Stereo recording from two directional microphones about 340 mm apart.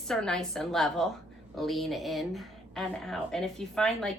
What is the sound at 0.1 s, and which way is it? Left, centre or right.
A woman's voice, centre.